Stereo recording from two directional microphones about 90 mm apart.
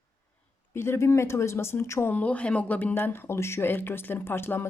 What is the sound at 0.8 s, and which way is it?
Speech, 30° left (ahead or behind).